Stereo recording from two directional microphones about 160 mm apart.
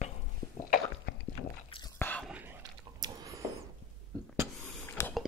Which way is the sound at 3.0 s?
20° right (ahead or behind).